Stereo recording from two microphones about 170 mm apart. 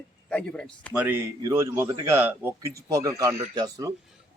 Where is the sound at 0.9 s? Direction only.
10° right (ahead or behind).